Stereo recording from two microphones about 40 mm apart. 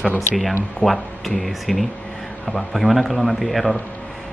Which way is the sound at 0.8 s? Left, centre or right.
Centre.